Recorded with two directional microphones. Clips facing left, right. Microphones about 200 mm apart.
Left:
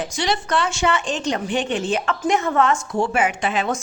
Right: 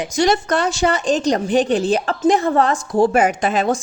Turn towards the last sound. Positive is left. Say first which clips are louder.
# right 4 dB
turn(degrees=-40)  # may be behind; listen again after turning